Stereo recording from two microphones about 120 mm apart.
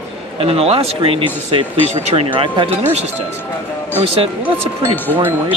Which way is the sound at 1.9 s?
60° right (ahead or behind).